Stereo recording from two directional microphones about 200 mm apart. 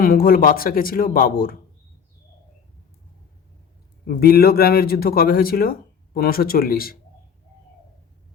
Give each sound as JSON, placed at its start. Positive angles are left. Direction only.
{"t": 0.0, "sound": "a man's voice", "side_deg": 45}
{"t": 4.0, "sound": "a man's voice", "side_deg": 50}